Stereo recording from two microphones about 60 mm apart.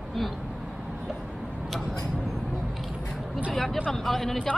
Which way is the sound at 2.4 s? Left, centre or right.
Centre.